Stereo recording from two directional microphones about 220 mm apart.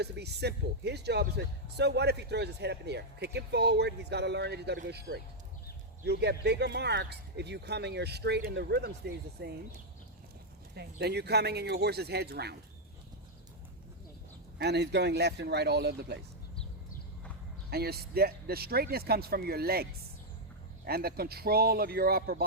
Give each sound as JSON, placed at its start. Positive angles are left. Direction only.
{"t": 0.0, "sound": "speech", "side_deg": -50}
{"t": 10.8, "sound": "speech", "side_deg": -50}
{"t": 14.6, "sound": "speech", "side_deg": -50}
{"t": 17.7, "sound": "speech", "side_deg": -45}